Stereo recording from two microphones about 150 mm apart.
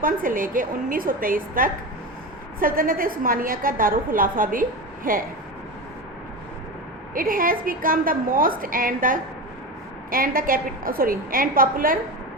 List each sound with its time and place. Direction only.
0.0 s a woman's voice: 65° right (ahead or behind)
7.1 s a woman's voice: 70° right (ahead or behind)